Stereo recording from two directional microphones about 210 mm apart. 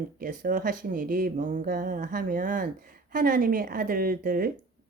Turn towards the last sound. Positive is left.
turn(degrees=-45)  # may be behind; listen again after turning